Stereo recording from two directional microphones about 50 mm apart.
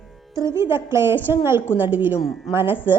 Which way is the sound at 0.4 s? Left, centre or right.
Right.